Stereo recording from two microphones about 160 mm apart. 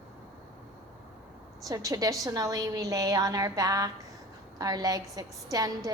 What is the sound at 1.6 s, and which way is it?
Speech, 20° right (ahead or behind).